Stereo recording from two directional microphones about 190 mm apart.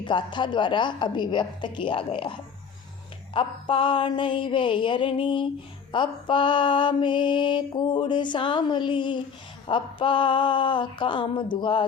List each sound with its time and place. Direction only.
0.0 s female singing: 25° left (ahead or behind)
3.3 s female singing: 25° left (ahead or behind)